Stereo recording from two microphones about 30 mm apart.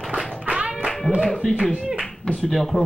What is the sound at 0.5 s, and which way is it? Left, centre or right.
Music, right.